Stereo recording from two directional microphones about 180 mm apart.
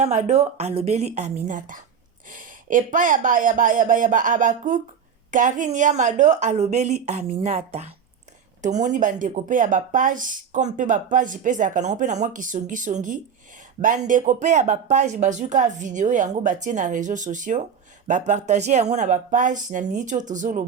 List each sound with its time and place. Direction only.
0.0 s a woman's voice: 40° right (ahead or behind)